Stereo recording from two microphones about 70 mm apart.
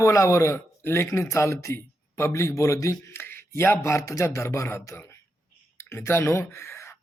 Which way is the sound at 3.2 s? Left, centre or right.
Left.